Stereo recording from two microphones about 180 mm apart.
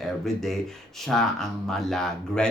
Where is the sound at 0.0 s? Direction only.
Centre (ahead or behind).